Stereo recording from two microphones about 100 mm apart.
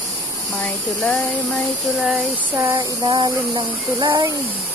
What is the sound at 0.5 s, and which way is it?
Speech, 10° left (ahead or behind).